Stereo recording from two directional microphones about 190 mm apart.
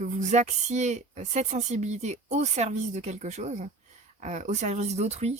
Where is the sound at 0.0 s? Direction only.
40° right (ahead or behind).